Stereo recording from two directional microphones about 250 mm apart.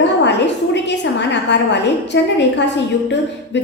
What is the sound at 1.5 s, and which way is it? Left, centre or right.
Speech, left.